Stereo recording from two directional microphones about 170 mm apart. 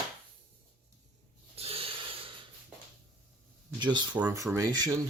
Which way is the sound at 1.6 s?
35° right (ahead or behind).